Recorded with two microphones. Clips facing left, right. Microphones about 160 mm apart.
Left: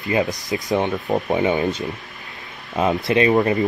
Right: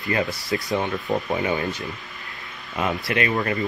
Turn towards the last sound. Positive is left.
turn(degrees=25)  # may be behind; listen again after turning